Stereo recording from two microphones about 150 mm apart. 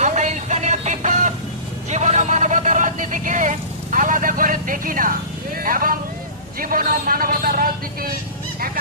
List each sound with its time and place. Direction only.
0.0 s music: 50° right (ahead or behind)
1.9 s vehicle: 50° right (ahead or behind); by 6.0 s 70° right (ahead or behind)
6.6 s a sound: 70° right (ahead or behind)